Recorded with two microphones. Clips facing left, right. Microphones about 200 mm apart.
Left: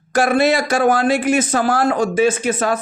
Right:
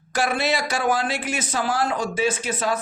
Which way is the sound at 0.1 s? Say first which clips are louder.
Left 8 dB; 50° left (ahead or behind).